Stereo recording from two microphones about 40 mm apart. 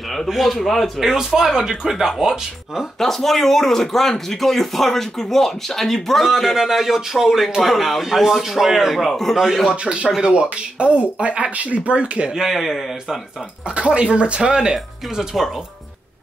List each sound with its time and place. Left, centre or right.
0.3 s a man's voice: centre
1.1 s a man's voice: centre
3.0 s speech: centre
6.2 s a man's voice: centre
10.2 s speech: right
12.4 s a man's voice: centre
13.7 s speech: right